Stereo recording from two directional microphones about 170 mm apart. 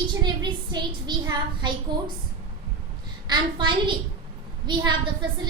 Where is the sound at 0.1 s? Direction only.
25° right (ahead or behind).